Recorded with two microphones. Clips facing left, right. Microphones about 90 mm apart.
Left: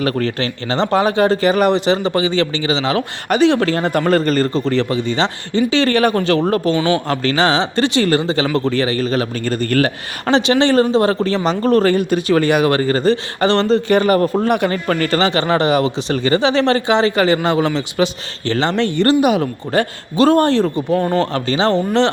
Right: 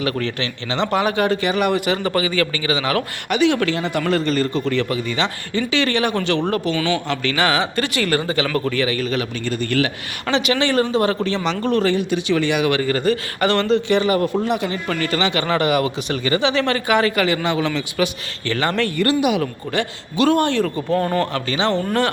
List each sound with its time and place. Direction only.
0.0 s speech: 40° left (ahead or behind)
1.7 s a man's voice: 25° left (ahead or behind)
3.2 s speech: 35° left (ahead or behind)
14.4 s a man's voice: 55° left (ahead or behind); by 19.0 s 20° left (ahead or behind)
19.4 s speech: 40° left (ahead or behind)
20.7 s a man's voice: 20° left (ahead or behind)
21.3 s speech: 35° left (ahead or behind)